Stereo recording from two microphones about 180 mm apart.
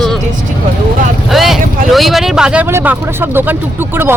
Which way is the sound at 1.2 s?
Centre (ahead or behind).